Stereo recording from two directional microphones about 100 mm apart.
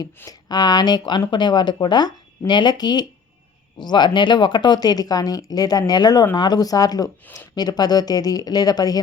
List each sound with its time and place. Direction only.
0.3 s speech: 45° left (ahead or behind)